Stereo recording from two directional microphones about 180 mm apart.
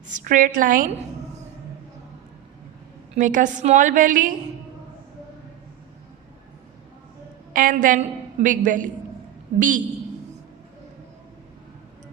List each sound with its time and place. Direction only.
0.2 s a woman's voice: 45° right (ahead or behind)
3.2 s a woman's voice: 45° right (ahead or behind)
7.5 s a woman's voice: 45° right (ahead or behind)